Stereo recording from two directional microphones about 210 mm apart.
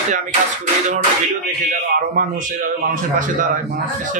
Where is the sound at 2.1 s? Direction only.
40° right (ahead or behind).